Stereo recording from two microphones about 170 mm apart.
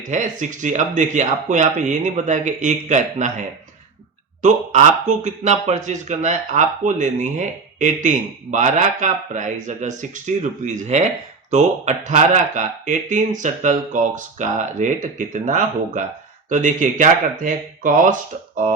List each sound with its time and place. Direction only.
0.1 s a man's voice: 45° right (ahead or behind)
4.4 s a man's voice: 45° right (ahead or behind)